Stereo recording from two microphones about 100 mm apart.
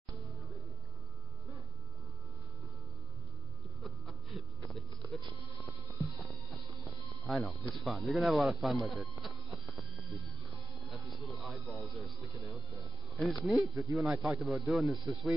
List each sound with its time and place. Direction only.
3.8 s a sound: centre (ahead or behind)
5.7 s music: 30° left (ahead or behind)
7.2 s speech: centre (ahead or behind)
10.7 s music: centre (ahead or behind)
11.7 s a sound: centre (ahead or behind)
13.1 s a man's voice: centre (ahead or behind)